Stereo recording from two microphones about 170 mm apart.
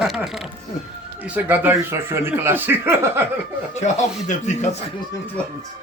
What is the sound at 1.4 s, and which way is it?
Speech, 10° right (ahead or behind).